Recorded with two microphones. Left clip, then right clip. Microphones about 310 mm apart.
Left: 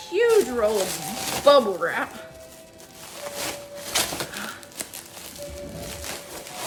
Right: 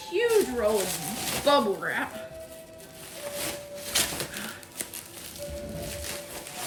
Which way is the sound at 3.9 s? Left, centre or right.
Centre.